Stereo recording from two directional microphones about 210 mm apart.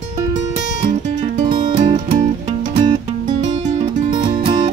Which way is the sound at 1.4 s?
20° right (ahead or behind).